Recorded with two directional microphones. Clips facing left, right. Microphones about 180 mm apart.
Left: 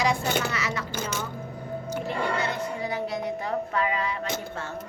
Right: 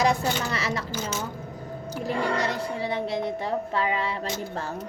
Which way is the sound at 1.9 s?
35° right (ahead or behind).